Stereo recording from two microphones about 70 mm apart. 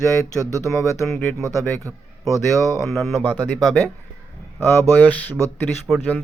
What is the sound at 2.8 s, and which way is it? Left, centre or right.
Speech, centre.